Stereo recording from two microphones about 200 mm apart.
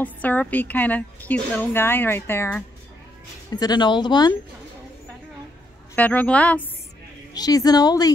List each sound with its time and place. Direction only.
0.0 s a woman's voice: 10° left (ahead or behind)
5.9 s a woman's voice: 10° left (ahead or behind)
7.3 s speech: 20° left (ahead or behind)